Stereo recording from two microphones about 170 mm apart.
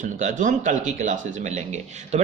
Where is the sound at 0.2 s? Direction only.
50° right (ahead or behind).